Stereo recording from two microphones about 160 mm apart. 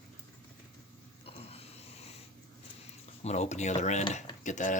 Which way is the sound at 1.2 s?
40° left (ahead or behind).